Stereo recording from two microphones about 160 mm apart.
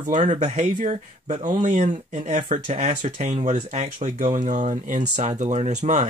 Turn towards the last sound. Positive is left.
turn(degrees=-45)  # may be behind; listen again after turning